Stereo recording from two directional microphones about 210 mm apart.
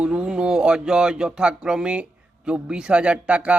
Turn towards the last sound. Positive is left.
turn(degrees=-5)  # may be behind; listen again after turning